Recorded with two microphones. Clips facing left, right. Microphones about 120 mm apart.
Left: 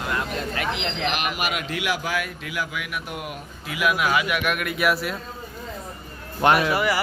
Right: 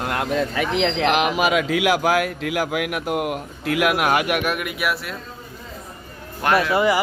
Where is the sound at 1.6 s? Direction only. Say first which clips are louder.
Right 8 dB; 90° right; by 4.4 s 60° right (ahead or behind).